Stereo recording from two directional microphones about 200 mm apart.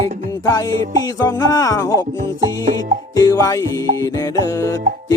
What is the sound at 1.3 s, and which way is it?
Music, 15° left (ahead or behind).